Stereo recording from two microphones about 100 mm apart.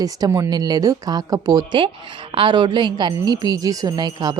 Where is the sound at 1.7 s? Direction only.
55° right (ahead or behind).